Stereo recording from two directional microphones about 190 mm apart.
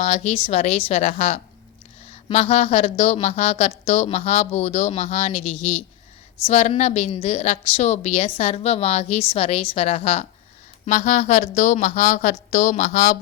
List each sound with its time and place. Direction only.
0.0 s a woman's voice: 35° left (ahead or behind)